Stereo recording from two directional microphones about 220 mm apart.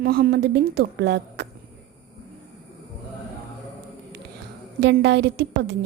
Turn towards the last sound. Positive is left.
turn(degrees=-50)  # may be behind; listen again after turning